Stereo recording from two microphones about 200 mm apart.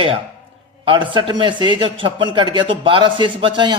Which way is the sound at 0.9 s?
25° right (ahead or behind).